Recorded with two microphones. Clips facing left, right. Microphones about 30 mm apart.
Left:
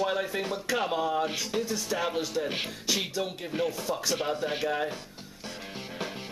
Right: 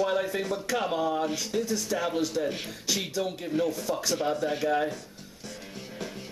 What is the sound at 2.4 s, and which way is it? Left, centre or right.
Speech, left.